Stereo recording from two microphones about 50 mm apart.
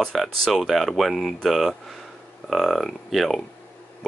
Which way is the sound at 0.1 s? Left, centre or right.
Centre.